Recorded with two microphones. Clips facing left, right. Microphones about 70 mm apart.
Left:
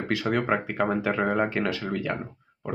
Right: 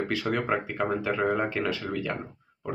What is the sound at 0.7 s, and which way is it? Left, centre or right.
Speech, left.